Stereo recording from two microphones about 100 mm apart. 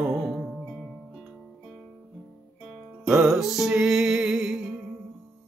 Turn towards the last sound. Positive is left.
turn(degrees=-5)  # may be behind; listen again after turning